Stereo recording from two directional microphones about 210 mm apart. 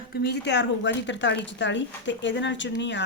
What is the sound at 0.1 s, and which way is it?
Speech, 50° left (ahead or behind).